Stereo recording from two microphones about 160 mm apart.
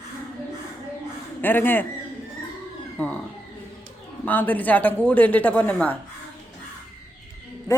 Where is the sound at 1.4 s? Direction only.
10° left (ahead or behind).